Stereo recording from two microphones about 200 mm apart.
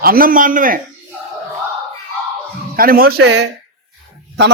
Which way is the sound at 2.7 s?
45° right (ahead or behind).